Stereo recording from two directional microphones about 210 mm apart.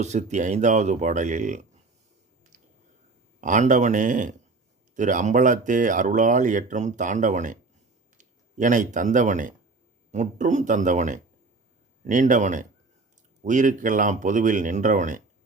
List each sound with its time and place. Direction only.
0.0 s speech: 35° right (ahead or behind)
3.4 s speech: 35° right (ahead or behind)